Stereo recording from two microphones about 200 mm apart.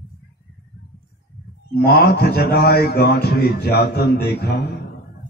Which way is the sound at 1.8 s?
50° left (ahead or behind).